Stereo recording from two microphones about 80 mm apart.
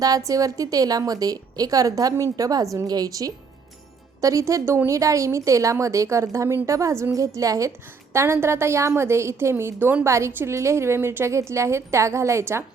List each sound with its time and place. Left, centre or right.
0.0 s a woman's voice: right
8.1 s a woman's voice: right